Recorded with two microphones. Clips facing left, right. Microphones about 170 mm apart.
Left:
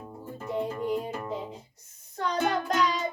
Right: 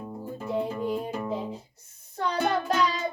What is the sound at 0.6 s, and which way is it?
Music, centre (ahead or behind).